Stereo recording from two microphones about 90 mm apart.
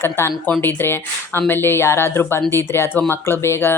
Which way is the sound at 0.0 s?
30° left (ahead or behind).